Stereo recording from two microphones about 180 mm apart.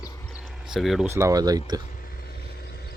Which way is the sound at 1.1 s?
15° right (ahead or behind).